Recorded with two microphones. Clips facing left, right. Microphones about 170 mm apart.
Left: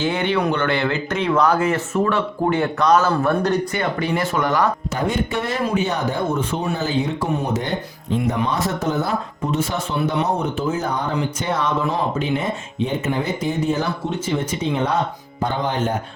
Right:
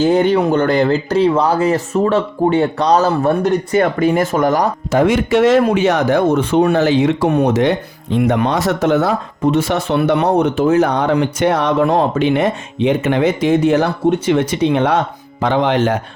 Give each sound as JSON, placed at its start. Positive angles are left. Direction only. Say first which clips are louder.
{"t": 0.0, "sound": "speech", "louder": "right 8 dB", "side_deg": -40}
{"t": 3.8, "sound": "speech", "louder": "right 8 dB", "side_deg": -45}
{"t": 4.9, "sound": "speech", "louder": "right 9 dB", "side_deg": -90}